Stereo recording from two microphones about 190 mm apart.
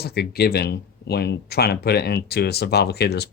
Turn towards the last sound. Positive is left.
turn(degrees=60)  # may be behind; listen again after turning